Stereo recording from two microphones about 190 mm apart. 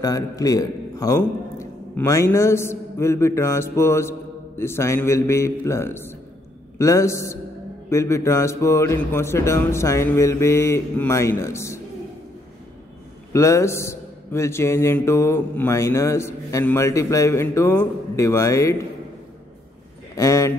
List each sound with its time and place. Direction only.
0.0 s a man's voice: 20° left (ahead or behind)
13.3 s a man's voice: 15° left (ahead or behind)
20.2 s a sound: 15° left (ahead or behind)